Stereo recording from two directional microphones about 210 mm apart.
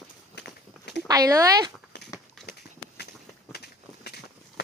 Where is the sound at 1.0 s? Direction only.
15° right (ahead or behind).